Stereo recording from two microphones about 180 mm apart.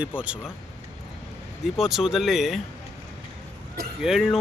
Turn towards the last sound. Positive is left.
turn(degrees=0)  # may be behind; listen again after turning